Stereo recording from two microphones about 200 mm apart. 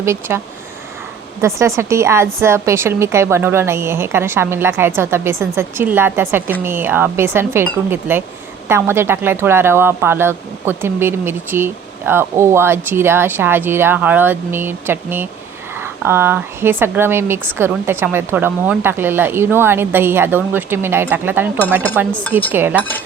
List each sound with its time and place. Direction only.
0.0 s a woman's voice: 10° right (ahead or behind)